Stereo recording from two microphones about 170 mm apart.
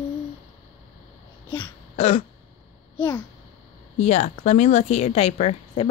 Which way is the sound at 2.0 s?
35° left (ahead or behind).